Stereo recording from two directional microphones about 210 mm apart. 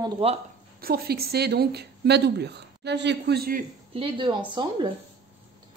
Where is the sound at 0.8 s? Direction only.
45° right (ahead or behind).